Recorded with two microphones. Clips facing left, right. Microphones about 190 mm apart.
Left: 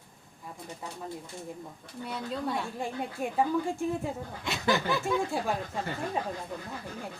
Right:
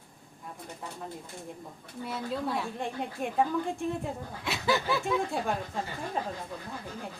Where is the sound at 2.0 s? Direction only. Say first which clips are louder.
Right 1 dB; centre (ahead or behind).